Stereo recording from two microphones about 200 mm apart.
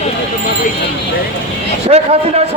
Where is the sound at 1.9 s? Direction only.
30° right (ahead or behind).